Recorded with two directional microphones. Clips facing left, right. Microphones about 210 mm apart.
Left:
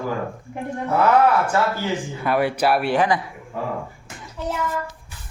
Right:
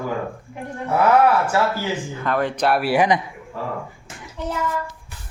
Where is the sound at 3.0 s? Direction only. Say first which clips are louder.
Right 2 dB; 20° right (ahead or behind).